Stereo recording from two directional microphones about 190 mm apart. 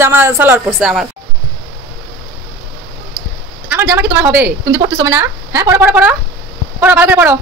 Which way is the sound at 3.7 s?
15° right (ahead or behind).